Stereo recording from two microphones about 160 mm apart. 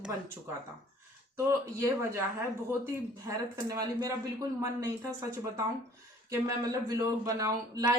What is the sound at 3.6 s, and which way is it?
Speech, 25° right (ahead or behind).